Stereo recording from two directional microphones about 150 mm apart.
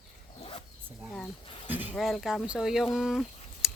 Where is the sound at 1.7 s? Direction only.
10° right (ahead or behind).